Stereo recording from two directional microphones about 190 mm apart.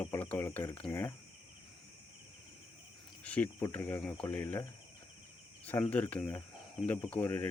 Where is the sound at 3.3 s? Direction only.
5° left (ahead or behind).